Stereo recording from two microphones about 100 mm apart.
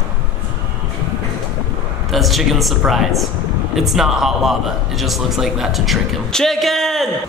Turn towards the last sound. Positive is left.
turn(degrees=5)  # may be behind; listen again after turning